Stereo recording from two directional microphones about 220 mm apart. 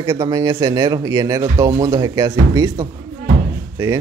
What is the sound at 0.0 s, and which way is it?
A man's voice, 15° right (ahead or behind).